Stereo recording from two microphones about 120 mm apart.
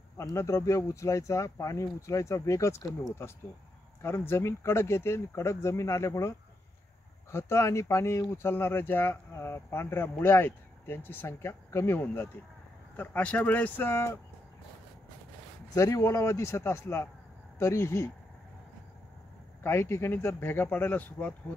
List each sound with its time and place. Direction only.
0.2 s speech: 25° left (ahead or behind)
15.7 s speech: 30° left (ahead or behind)
19.6 s speech: 20° left (ahead or behind)